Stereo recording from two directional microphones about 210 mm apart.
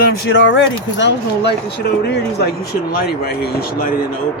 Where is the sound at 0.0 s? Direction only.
60° left (ahead or behind).